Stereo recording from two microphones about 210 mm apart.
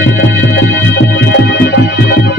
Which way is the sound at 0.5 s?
50° left (ahead or behind).